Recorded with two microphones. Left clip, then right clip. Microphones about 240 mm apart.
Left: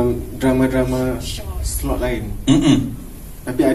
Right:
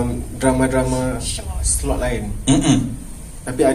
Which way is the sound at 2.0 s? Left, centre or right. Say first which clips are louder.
Left 3 dB; right.